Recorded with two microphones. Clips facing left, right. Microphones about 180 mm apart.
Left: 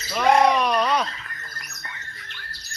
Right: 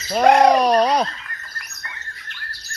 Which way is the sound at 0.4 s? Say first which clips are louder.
Right 6 dB; 40° right (ahead or behind).